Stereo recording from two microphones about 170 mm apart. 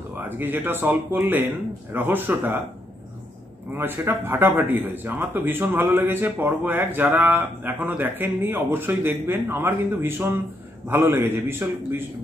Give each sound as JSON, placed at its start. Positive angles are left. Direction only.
{"t": 0.2, "sound": "speech", "side_deg": -10}
{"t": 3.7, "sound": "speech", "side_deg": -15}